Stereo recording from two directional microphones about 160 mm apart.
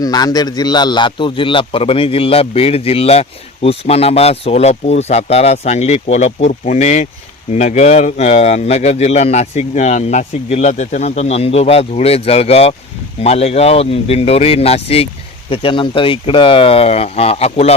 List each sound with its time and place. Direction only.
0.0 s a man's voice: 25° left (ahead or behind); by 17.7 s 40° left (ahead or behind)